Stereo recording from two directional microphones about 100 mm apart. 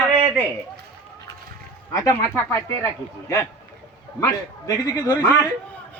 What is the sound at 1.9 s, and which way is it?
Speech, 35° left (ahead or behind).